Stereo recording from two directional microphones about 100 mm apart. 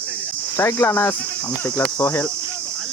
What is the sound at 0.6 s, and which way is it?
Cricket, 25° left (ahead or behind).